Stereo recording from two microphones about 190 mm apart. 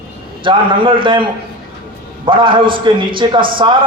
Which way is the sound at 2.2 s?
25° right (ahead or behind).